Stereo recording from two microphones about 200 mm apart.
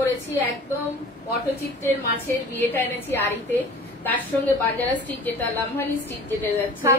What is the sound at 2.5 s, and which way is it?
Speech, 10° left (ahead or behind).